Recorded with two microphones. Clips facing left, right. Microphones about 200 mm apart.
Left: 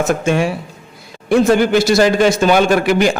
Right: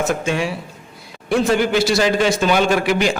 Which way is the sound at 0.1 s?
50° left (ahead or behind).